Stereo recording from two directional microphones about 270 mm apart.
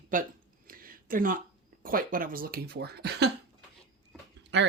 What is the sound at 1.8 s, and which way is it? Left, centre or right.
Speech, right.